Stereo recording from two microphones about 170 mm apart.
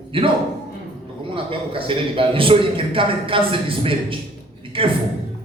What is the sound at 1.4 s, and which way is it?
A man's voice, 30° right (ahead or behind).